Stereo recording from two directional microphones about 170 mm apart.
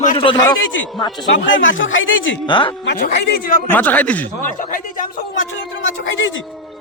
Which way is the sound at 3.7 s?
10° left (ahead or behind).